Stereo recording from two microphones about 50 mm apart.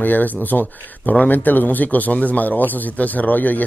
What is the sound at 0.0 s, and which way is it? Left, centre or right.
Speech, left.